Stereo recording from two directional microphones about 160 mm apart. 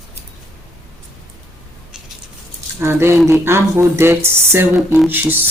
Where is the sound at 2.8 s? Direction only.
15° right (ahead or behind).